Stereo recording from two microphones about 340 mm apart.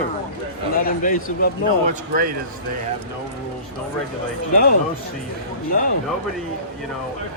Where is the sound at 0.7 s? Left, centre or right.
Left.